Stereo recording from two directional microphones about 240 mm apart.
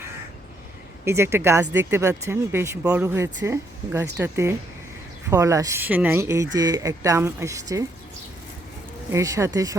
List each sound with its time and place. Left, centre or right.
1.0 s speech: centre
9.1 s speech: centre